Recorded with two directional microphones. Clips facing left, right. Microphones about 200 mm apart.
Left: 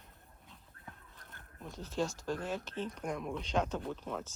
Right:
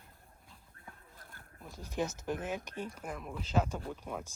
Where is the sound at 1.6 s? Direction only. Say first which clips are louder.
Even; 10° right (ahead or behind).